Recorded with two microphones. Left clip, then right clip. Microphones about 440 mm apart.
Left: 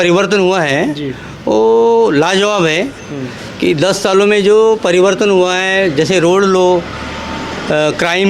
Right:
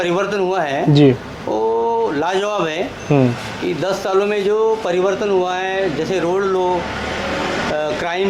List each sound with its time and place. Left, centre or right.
0.0 s speech: left
7.8 s speech: left